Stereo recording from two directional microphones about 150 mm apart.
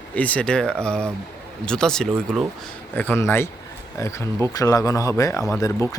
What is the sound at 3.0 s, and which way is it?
Speech, 15° left (ahead or behind).